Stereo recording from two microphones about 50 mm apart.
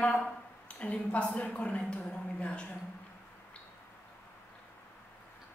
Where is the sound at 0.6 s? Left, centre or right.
Left.